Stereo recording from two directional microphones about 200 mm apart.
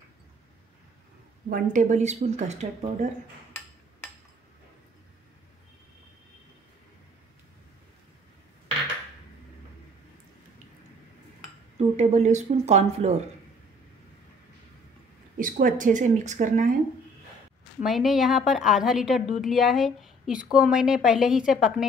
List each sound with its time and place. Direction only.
1.5 s speech: 40° right (ahead or behind)
12.0 s speech: 35° right (ahead or behind)
15.3 s speech: 45° right (ahead or behind)
17.8 s a woman's voice: centre (ahead or behind)